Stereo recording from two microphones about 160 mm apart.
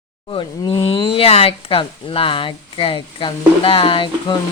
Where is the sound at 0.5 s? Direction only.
30° left (ahead or behind).